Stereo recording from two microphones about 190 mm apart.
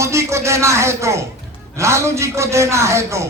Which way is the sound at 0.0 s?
15° right (ahead or behind).